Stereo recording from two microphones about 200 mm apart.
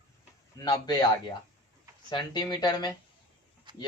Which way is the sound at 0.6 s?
20° left (ahead or behind).